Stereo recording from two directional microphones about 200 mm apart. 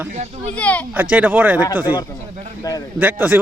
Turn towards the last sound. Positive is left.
turn(degrees=-10)  # may be behind; listen again after turning